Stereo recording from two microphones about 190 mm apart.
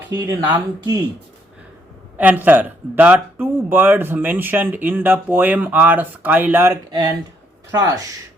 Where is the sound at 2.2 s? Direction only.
10° right (ahead or behind).